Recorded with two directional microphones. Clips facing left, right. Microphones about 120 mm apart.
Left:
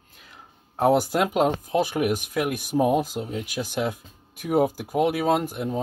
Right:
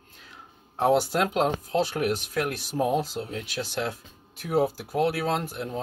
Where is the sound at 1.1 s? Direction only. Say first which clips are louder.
Left 3 dB; 10° left (ahead or behind).